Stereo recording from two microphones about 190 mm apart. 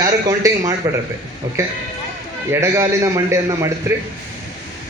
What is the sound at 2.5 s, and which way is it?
A man's voice, 15° right (ahead or behind).